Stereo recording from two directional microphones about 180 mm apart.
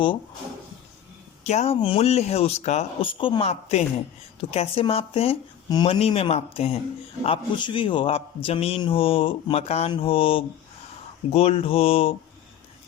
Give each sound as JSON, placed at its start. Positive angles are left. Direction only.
{"t": 1.5, "sound": "speech", "side_deg": 35}